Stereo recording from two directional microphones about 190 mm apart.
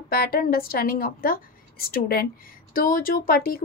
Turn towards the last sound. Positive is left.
turn(degrees=50)  # may be behind; listen again after turning